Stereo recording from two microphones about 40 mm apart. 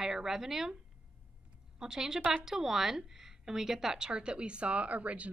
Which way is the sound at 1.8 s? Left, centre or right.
Centre.